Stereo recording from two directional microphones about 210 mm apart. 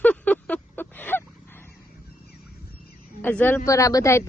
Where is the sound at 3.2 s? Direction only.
10° left (ahead or behind).